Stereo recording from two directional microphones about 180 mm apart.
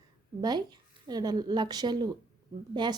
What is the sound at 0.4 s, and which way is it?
A woman's voice, 25° right (ahead or behind).